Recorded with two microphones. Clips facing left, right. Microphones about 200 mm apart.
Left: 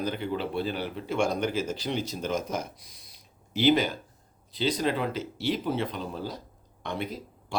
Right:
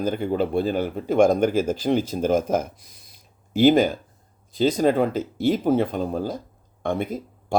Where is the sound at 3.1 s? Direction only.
50° right (ahead or behind).